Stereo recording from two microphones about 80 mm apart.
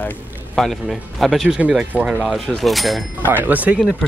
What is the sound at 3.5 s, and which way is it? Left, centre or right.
Speech, centre.